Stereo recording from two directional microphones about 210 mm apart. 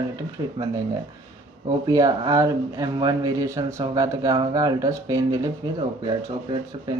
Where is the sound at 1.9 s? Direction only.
15° right (ahead or behind).